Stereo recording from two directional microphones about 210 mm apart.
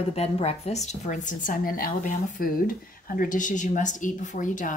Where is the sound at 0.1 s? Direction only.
30° left (ahead or behind).